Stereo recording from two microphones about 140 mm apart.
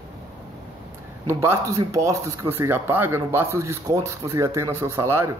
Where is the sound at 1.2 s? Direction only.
20° right (ahead or behind).